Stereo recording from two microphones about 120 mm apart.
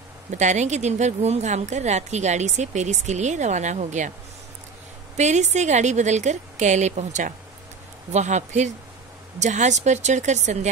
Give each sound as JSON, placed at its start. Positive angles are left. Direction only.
{"t": 0.3, "sound": "a woman's voice", "side_deg": -85}
{"t": 5.1, "sound": "a woman's voice", "side_deg": -80}
{"t": 8.1, "sound": "a woman's voice", "side_deg": -75}